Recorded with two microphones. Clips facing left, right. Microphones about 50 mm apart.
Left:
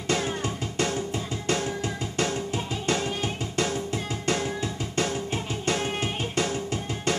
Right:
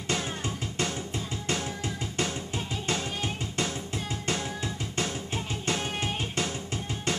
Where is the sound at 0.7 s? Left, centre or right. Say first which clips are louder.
Left 6 dB; left.